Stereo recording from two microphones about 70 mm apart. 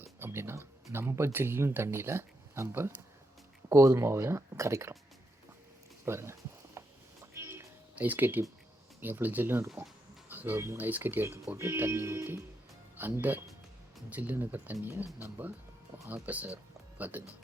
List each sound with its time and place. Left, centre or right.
0.0 s speech: right
6.1 s speech: right
6.8 s a sound: right
7.9 s speech: right
10.2 s a sound: right
10.8 s speech: right